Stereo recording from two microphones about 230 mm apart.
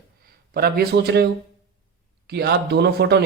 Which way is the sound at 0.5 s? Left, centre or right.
Right.